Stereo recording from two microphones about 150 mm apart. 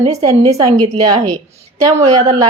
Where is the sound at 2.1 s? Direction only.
30° right (ahead or behind).